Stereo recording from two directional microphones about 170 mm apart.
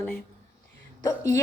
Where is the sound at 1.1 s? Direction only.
20° left (ahead or behind).